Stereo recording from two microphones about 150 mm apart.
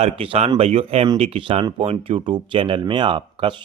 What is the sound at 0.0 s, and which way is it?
Speech, 40° right (ahead or behind).